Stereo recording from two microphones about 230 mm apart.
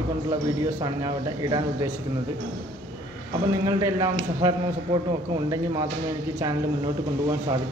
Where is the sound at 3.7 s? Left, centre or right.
Centre.